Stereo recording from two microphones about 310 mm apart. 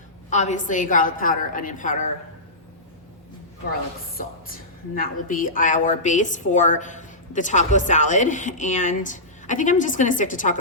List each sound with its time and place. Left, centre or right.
0.3 s a woman's voice: left
4.2 s a woman's voice: left